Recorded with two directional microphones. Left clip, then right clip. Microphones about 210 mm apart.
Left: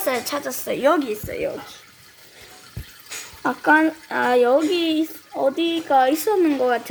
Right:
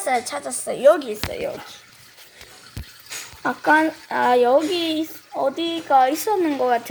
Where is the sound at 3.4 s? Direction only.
15° right (ahead or behind); by 6.6 s 10° left (ahead or behind).